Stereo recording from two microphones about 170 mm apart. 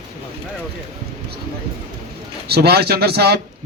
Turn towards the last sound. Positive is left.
turn(degrees=-70)  # may be behind; listen again after turning